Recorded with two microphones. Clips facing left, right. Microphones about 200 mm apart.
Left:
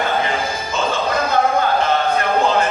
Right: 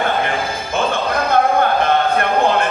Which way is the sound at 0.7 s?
55° right (ahead or behind).